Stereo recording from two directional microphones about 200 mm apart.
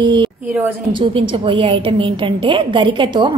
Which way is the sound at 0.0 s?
25° right (ahead or behind).